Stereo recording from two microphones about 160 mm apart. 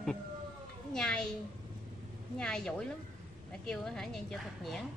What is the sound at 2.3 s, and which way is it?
A woman's voice, 5° left (ahead or behind).